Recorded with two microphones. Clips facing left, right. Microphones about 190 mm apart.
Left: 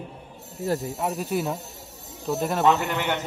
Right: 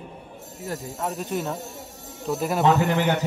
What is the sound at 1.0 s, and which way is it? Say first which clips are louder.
Speech: left 2 dB; 5° left (ahead or behind).